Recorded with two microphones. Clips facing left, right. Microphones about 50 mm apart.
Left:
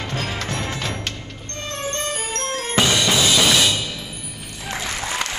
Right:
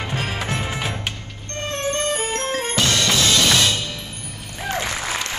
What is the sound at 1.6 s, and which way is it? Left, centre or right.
Music, right.